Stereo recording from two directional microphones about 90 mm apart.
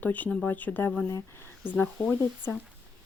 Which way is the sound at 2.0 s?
30° left (ahead or behind).